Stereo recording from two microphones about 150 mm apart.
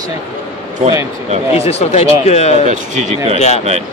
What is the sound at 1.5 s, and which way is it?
Speech, 45° left (ahead or behind).